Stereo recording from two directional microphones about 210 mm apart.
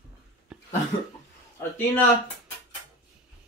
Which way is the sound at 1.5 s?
10° left (ahead or behind).